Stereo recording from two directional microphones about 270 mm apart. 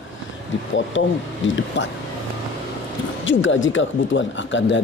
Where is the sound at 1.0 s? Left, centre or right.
Left.